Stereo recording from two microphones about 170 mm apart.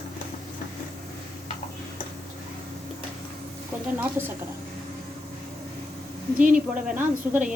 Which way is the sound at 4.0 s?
15° right (ahead or behind).